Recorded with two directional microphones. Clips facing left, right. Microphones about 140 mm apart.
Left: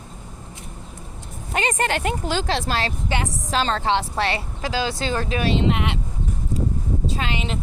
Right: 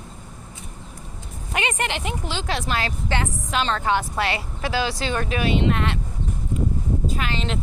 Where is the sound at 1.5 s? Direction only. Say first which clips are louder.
Left 3 dB; 35° left (ahead or behind).